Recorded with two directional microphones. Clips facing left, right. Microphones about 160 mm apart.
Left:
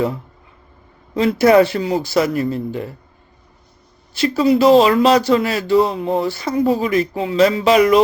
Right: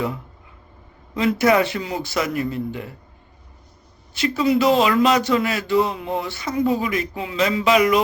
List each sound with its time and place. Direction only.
1.1 s speech: 35° left (ahead or behind)
4.1 s speech: 35° left (ahead or behind)